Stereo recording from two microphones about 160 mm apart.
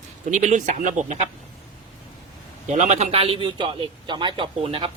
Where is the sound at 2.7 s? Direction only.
45° right (ahead or behind).